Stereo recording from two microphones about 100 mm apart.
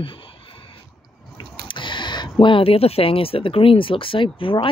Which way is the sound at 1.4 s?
55° left (ahead or behind).